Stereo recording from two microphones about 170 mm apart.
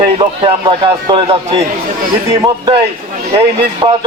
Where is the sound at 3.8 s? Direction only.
30° right (ahead or behind).